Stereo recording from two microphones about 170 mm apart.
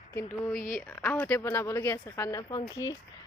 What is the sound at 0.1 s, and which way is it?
Speech, 15° left (ahead or behind).